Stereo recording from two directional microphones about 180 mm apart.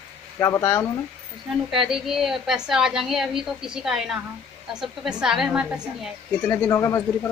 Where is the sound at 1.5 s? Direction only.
Centre (ahead or behind).